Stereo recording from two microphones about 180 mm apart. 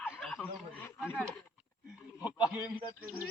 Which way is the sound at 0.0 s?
5° left (ahead or behind).